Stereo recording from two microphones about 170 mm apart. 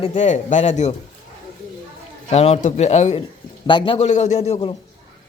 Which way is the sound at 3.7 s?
30° left (ahead or behind).